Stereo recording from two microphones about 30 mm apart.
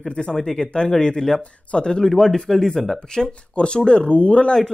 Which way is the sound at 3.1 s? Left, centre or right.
Left.